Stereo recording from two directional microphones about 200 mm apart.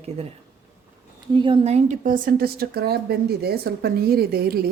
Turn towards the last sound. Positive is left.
turn(degrees=-50)  # may be behind; listen again after turning